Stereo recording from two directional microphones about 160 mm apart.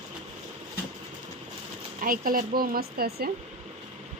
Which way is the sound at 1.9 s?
60° right (ahead or behind).